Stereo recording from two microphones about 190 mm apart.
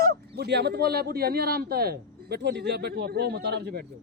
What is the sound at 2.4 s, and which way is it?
Speech, 65° right (ahead or behind).